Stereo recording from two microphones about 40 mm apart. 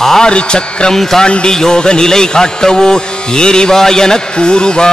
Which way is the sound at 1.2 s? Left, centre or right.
Left.